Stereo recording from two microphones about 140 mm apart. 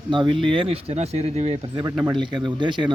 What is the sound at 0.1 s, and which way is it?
A man's voice, 35° right (ahead or behind).